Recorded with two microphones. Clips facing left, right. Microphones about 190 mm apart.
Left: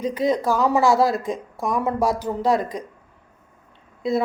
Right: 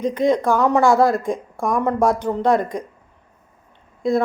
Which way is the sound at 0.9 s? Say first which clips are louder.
Right 3 dB; 50° right (ahead or behind).